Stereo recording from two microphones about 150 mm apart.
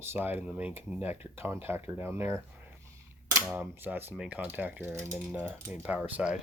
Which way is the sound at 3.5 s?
10° right (ahead or behind).